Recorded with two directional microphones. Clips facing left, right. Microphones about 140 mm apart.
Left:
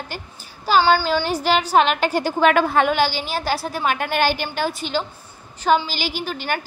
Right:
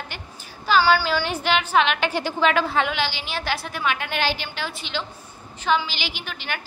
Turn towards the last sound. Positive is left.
turn(degrees=40)  # may be behind; listen again after turning